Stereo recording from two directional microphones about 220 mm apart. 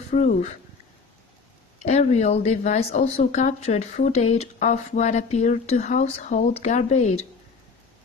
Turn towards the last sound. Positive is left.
turn(degrees=30)  # may be behind; listen again after turning